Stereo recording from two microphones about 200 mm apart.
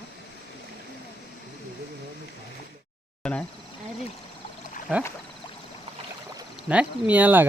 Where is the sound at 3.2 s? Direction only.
5° left (ahead or behind).